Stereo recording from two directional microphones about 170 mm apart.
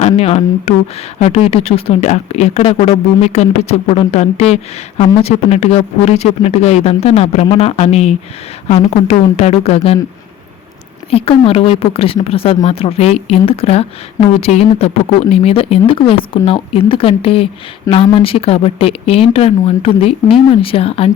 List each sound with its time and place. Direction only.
0.0 s speech: 40° left (ahead or behind)
11.1 s speech: 35° left (ahead or behind)